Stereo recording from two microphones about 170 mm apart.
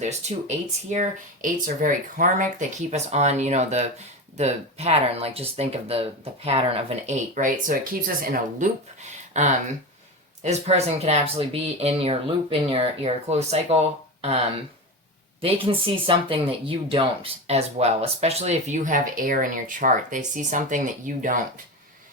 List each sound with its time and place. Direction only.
0.0 s speech: 40° right (ahead or behind)
7.1 s speech: 45° right (ahead or behind)
15.4 s speech: 35° right (ahead or behind); by 21.3 s 50° right (ahead or behind)